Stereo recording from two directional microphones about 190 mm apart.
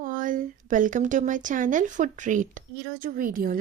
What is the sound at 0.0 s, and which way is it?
A woman's voice, 45° right (ahead or behind).